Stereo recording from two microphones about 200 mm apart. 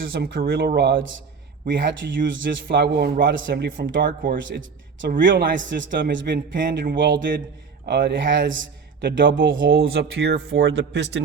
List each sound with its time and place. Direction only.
0.1 s speech: 50° right (ahead or behind)
3.4 s speech: 45° right (ahead or behind)
4.9 s speech: 65° right (ahead or behind)
9.7 s speech: 55° right (ahead or behind)